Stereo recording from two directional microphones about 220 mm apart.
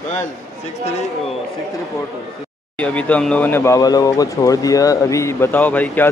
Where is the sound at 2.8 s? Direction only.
5° left (ahead or behind).